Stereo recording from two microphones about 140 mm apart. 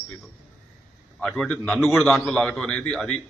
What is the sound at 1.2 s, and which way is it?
Speech, 5° left (ahead or behind).